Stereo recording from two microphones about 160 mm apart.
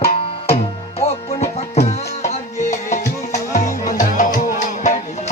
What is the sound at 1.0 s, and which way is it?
Music, 40° left (ahead or behind).